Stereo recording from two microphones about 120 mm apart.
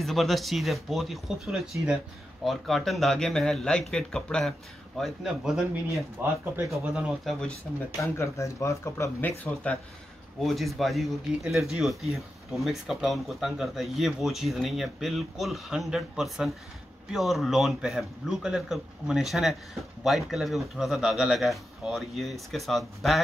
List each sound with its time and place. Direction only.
0.0 s speech: centre (ahead or behind)
8.0 s speech: 25° left (ahead or behind); by 23.2 s centre (ahead or behind)